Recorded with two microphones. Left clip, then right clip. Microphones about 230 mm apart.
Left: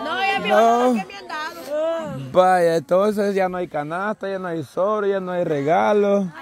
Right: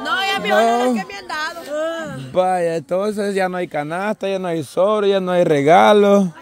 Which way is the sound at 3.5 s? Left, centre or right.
Right.